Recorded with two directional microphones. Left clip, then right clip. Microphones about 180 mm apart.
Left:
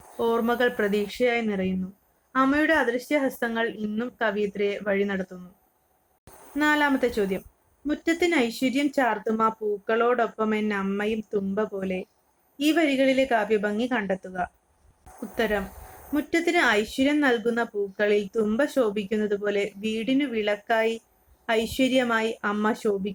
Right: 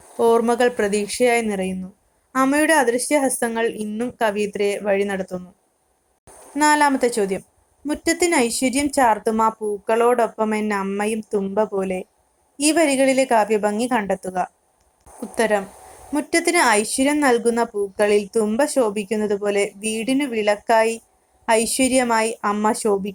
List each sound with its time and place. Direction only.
0.2 s speech: 15° right (ahead or behind)
6.6 s speech: 15° right (ahead or behind)